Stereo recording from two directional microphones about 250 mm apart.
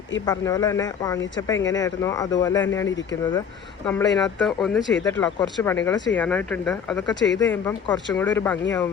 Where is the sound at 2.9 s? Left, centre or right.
Left.